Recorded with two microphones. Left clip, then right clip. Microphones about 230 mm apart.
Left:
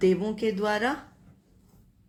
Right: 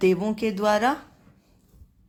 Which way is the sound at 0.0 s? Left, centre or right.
Right.